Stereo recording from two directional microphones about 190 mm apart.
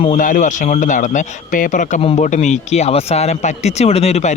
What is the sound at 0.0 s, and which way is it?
Speech, 40° left (ahead or behind).